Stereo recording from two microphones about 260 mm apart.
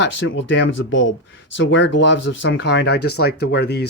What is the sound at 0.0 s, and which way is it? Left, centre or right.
Speech, left.